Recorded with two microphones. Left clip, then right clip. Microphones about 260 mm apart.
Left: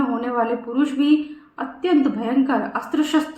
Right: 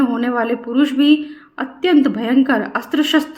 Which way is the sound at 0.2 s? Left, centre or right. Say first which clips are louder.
Right 3 dB; right.